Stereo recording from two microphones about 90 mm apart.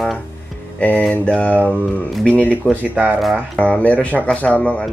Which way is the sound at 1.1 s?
15° left (ahead or behind).